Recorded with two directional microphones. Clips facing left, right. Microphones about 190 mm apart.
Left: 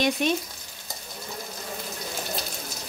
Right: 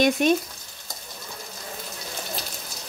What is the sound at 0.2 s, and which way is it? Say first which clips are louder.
Stir: right 5 dB; 50° right (ahead or behind).